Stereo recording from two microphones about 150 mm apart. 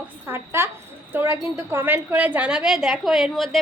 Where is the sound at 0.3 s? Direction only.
15° right (ahead or behind).